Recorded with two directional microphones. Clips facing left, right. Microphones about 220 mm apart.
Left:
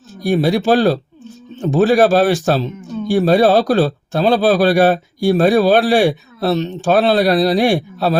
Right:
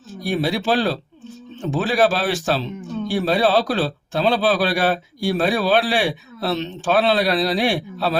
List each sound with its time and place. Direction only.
0.2 s speech: 45° left (ahead or behind)